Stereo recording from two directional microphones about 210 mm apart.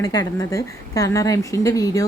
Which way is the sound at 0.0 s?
20° left (ahead or behind).